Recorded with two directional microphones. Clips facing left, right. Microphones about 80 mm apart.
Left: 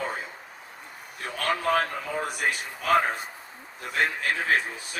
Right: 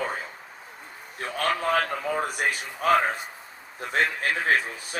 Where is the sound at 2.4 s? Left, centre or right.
Right.